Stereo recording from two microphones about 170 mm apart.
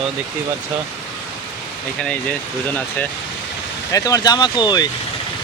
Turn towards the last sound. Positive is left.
turn(degrees=25)  # may be behind; listen again after turning